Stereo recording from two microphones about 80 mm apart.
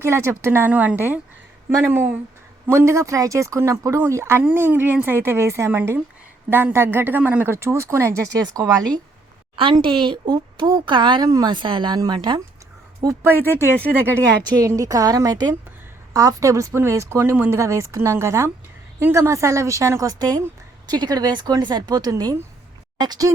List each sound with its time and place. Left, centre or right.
0.0 s speech: right
8.4 s speech: right
9.6 s speech: right
10.0 s a woman's voice: right
11.3 s a woman's voice: right
11.5 s speech: right
11.9 s a woman's voice: right
13.7 s speech: centre
14.4 s a woman's voice: right
16.1 s speech: right